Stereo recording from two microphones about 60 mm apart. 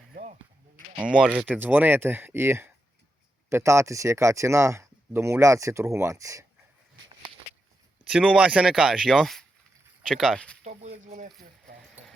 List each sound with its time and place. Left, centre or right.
0.9 s speech: centre
1.5 s speech: right
3.5 s speech: right
8.1 s speech: centre
8.8 s speech: centre
10.0 s speech: centre